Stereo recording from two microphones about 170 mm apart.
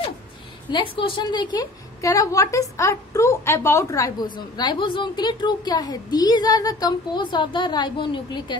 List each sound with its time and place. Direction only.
0.7 s a woman's voice: 30° left (ahead or behind)